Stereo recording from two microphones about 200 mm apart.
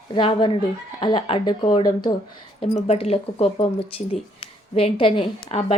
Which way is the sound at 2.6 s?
30° left (ahead or behind).